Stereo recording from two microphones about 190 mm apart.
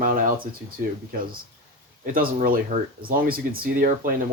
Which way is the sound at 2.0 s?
50° right (ahead or behind).